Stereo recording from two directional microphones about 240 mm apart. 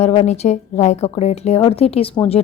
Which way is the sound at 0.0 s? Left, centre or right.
Left.